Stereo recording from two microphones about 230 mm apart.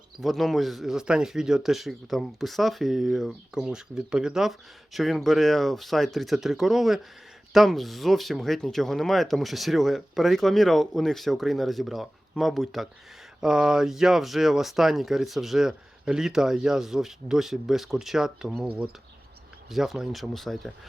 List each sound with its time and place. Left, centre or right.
0.2 s speech: centre